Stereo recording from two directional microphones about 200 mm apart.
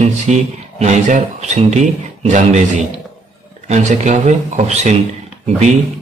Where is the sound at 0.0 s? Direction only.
35° right (ahead or behind).